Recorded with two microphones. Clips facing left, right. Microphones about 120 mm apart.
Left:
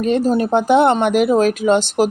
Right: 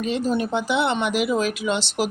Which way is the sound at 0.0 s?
45° left (ahead or behind).